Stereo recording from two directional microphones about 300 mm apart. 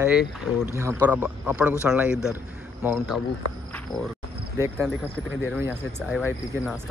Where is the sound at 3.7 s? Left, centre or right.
Centre.